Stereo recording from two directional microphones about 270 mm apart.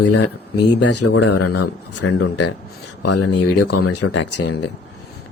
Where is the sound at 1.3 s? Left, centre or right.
Left.